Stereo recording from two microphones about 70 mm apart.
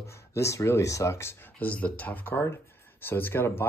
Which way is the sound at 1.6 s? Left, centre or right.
Left.